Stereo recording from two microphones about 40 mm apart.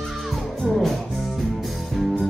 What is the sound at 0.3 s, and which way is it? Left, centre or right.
Music, centre.